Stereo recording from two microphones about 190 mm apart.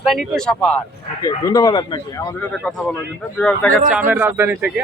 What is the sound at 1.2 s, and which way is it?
A man's voice, 20° left (ahead or behind).